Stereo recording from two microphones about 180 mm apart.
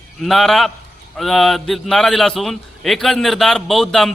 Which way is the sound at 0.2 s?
Centre (ahead or behind).